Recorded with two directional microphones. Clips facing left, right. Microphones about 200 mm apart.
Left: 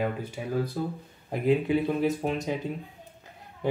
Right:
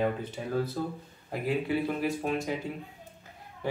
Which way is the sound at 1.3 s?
20° left (ahead or behind).